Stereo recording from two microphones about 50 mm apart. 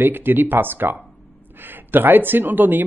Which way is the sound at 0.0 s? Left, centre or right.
Right.